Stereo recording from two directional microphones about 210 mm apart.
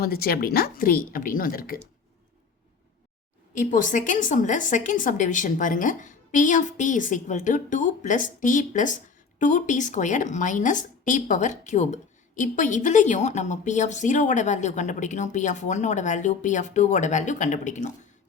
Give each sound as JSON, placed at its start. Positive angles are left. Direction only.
{"t": 0.0, "sound": "a woman's voice", "side_deg": 45}
{"t": 3.5, "sound": "a woman's voice", "side_deg": 40}